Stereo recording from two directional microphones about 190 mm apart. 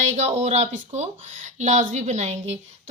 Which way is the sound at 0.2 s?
35° right (ahead or behind).